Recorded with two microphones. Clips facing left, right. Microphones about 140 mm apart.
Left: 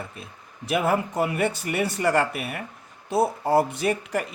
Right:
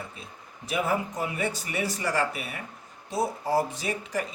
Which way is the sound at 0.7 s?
65° left (ahead or behind).